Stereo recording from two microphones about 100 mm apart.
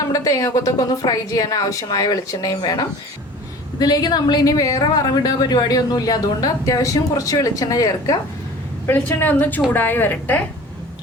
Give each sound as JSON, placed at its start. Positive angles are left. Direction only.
{"t": 0.1, "sound": "speech", "side_deg": 35}
{"t": 3.8, "sound": "speech", "side_deg": 40}
{"t": 8.9, "sound": "a woman's voice", "side_deg": 15}